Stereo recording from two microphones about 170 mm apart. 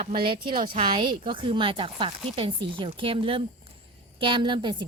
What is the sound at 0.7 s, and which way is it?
Speech, 30° right (ahead or behind).